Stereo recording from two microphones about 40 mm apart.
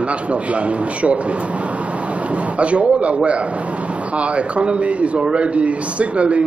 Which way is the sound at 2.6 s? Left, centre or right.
Right.